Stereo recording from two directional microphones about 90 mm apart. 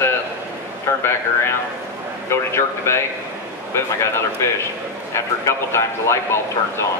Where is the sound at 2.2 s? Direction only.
30° left (ahead or behind).